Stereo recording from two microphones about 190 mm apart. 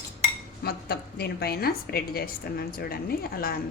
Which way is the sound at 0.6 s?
55° left (ahead or behind).